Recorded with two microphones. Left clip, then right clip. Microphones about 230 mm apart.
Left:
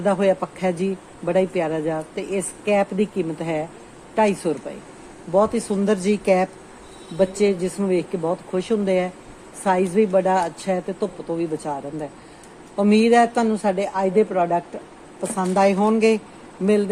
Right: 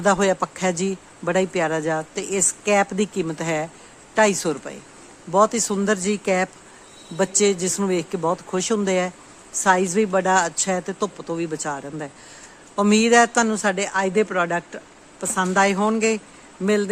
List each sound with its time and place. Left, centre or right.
0.0 s speech: right